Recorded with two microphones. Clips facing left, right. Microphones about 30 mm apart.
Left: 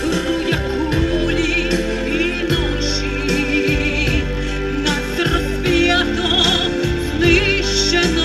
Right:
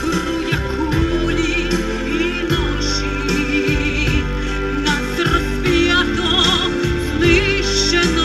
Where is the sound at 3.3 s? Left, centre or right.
Centre.